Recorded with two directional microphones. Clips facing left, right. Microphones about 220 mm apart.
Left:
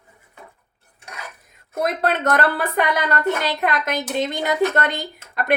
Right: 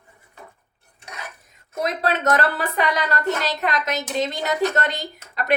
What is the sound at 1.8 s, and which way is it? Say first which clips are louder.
A woman's voice: left 1 dB; 55° left (ahead or behind).